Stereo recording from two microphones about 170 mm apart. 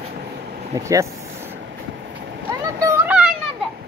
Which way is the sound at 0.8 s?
20° right (ahead or behind).